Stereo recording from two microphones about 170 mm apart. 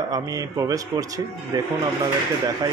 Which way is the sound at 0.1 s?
20° right (ahead or behind).